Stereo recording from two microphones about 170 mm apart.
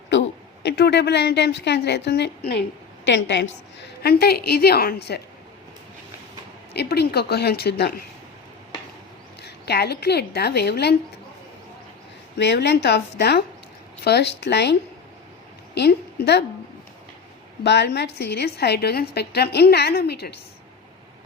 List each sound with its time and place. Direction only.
0.1 s a woman's voice: 85° left
3.1 s a woman's voice: 90° left
3.8 s a woman's voice: 65° left (ahead or behind)
6.7 s a woman's voice: 75° left (ahead or behind)
9.4 s speech: 75° left (ahead or behind)
12.4 s a woman's voice: 90° left
17.6 s a woman's voice: 85° left